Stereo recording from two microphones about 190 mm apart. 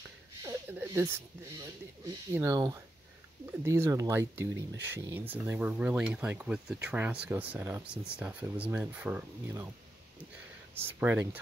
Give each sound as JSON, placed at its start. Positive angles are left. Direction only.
{"t": 0.4, "sound": "a sound", "side_deg": -15}
{"t": 2.3, "sound": "speech", "side_deg": -15}
{"t": 3.6, "sound": "speech", "side_deg": -15}
{"t": 10.7, "sound": "speech", "side_deg": -10}